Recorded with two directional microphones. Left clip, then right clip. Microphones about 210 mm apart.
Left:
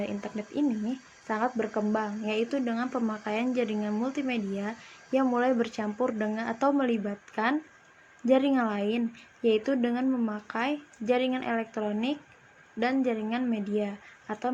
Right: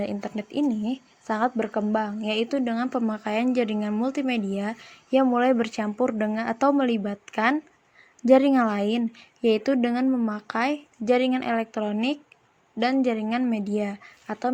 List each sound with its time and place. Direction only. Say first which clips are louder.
0.0 s speech: right 4 dB; 35° right (ahead or behind)